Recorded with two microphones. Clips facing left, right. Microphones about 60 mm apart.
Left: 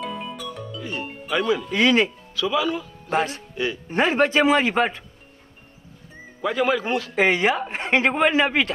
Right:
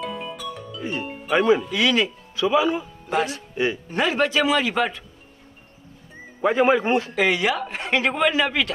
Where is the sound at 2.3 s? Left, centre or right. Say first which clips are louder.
Right 6 dB; right.